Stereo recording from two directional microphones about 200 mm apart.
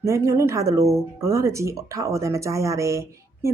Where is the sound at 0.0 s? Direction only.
15° right (ahead or behind).